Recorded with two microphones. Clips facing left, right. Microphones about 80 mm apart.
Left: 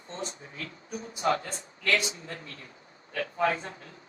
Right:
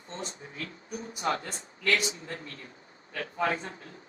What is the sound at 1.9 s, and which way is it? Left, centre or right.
Speech, left.